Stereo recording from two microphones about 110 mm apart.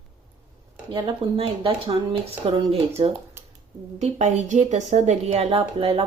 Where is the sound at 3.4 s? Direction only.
25° right (ahead or behind).